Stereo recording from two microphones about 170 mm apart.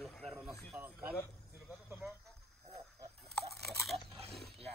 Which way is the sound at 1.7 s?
Centre (ahead or behind).